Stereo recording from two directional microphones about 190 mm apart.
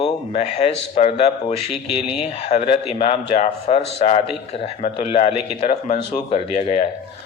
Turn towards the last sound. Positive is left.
turn(degrees=30)  # may be behind; listen again after turning